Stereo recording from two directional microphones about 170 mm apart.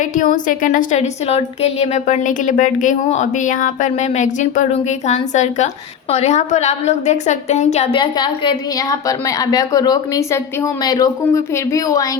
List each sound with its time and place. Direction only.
0.0 s a woman's voice: 50° left (ahead or behind); by 12.0 s 20° left (ahead or behind)